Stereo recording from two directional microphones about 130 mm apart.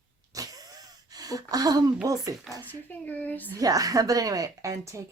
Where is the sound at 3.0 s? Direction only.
15° left (ahead or behind).